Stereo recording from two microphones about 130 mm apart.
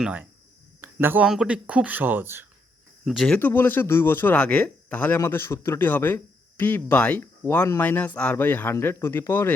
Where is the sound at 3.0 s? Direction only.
Centre (ahead or behind).